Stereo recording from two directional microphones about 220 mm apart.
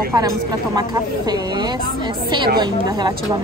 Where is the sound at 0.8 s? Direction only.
20° right (ahead or behind).